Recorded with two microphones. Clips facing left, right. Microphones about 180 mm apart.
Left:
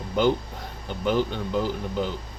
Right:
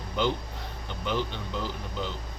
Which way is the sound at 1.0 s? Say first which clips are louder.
Left 7 dB; 45° left (ahead or behind).